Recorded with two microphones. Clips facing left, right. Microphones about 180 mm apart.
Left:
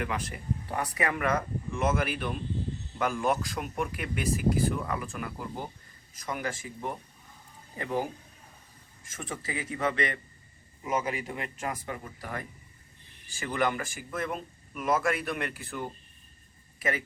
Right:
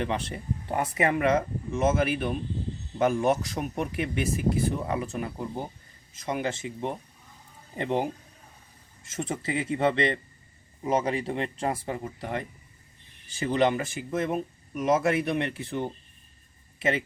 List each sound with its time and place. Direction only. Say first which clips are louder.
0.0 s speech: right 4 dB; 30° right (ahead or behind)
7.8 s speech: right 4 dB; 25° right (ahead or behind)
9.1 s speech: right 7 dB; 25° right (ahead or behind)